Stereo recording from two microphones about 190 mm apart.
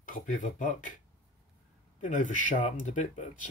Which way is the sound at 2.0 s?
45° left (ahead or behind).